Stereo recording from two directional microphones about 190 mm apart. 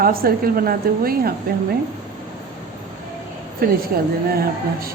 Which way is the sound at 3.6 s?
50° right (ahead or behind).